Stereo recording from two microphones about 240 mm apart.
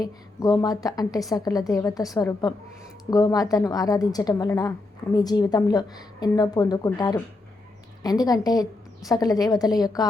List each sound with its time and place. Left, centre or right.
0.0 s a woman's voice: centre